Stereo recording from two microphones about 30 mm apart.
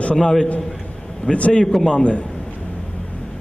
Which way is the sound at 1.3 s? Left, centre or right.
Left.